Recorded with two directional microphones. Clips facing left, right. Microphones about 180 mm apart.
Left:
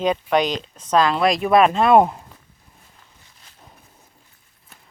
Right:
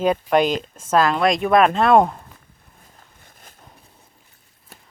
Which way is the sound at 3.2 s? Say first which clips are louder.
Right 5 dB; 50° right (ahead or behind).